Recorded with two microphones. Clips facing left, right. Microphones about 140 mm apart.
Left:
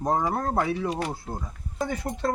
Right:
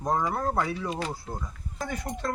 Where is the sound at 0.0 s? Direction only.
25° left (ahead or behind).